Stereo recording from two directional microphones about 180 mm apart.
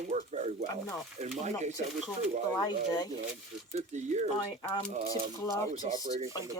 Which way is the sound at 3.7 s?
40° right (ahead or behind).